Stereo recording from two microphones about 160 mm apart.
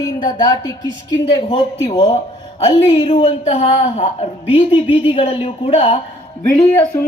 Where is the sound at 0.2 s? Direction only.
25° left (ahead or behind).